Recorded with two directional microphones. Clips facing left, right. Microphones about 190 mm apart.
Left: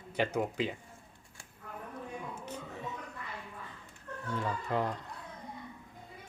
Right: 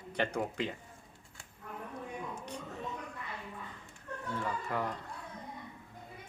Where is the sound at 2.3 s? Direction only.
5° left (ahead or behind).